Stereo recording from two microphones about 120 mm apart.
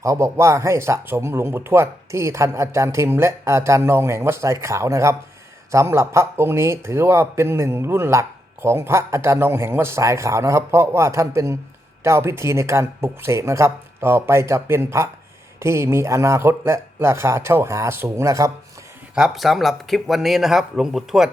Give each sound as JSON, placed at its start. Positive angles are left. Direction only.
{"t": 0.0, "sound": "speech", "side_deg": -25}
{"t": 19.1, "sound": "speech", "side_deg": -5}